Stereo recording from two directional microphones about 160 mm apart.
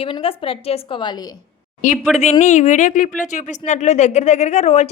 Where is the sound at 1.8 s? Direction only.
50° left (ahead or behind).